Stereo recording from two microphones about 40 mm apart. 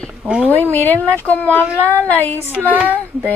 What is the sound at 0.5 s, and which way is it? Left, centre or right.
Speech, left.